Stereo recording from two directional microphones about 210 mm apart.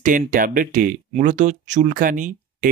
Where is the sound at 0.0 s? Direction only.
40° right (ahead or behind).